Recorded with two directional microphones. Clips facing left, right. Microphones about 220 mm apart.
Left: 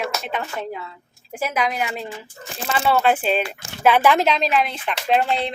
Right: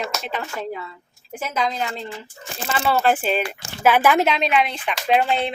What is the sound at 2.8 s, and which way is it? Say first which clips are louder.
Speech: left 1 dB; 5° right (ahead or behind).